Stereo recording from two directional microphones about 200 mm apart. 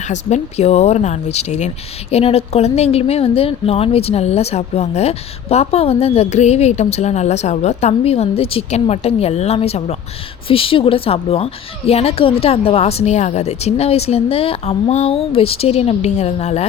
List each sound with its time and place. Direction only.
0.0 s speech: 35° left (ahead or behind)